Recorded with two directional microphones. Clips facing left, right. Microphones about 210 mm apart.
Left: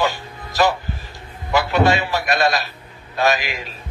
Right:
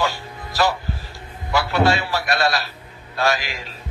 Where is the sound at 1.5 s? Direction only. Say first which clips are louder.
Left 2 dB; 20° left (ahead or behind).